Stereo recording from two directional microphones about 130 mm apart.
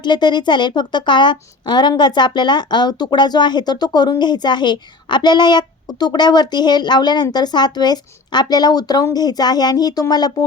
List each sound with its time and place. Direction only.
0.0 s a woman's voice: 35° left (ahead or behind)